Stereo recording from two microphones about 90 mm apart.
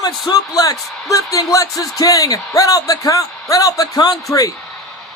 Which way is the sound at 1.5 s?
35° left (ahead or behind).